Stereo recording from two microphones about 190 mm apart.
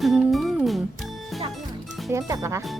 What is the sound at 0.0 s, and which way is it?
Music, centre (ahead or behind).